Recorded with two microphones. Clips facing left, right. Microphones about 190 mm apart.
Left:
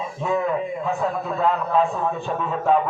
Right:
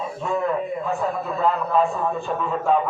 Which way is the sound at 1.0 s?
Centre (ahead or behind).